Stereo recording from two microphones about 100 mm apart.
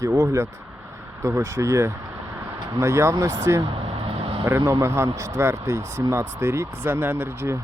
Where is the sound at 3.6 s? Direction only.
65° right (ahead or behind).